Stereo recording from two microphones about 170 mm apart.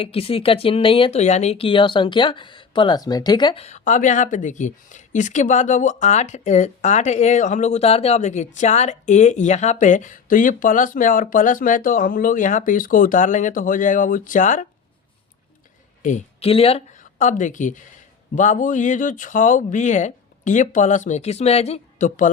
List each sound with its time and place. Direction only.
0.0 s speech: 35° left (ahead or behind)
3.6 s speech: 45° left (ahead or behind)
16.0 s speech: 40° left (ahead or behind)